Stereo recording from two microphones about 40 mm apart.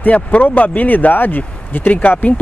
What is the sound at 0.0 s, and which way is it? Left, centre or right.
Speech, left.